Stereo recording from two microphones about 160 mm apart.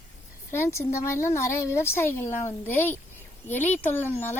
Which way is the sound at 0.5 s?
15° left (ahead or behind).